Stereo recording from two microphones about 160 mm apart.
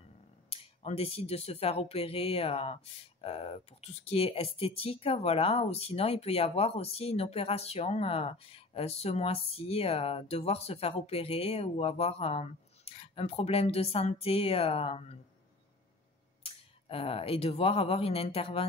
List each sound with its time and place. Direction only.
0.5 s speech: 40° left (ahead or behind)
16.4 s speech: 35° left (ahead or behind)